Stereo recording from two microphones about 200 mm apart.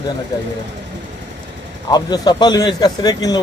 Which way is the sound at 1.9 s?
20° left (ahead or behind).